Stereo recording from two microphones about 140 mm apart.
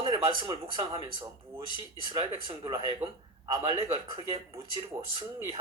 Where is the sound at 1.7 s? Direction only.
35° right (ahead or behind).